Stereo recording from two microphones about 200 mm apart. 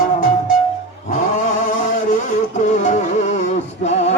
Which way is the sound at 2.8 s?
35° left (ahead or behind).